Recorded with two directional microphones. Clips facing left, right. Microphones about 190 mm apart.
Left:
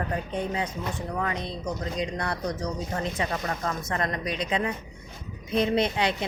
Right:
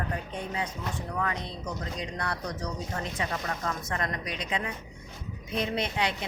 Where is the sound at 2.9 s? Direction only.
35° left (ahead or behind).